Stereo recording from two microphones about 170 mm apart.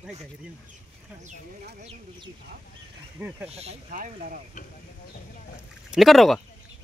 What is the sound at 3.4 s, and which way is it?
Speech, 35° right (ahead or behind).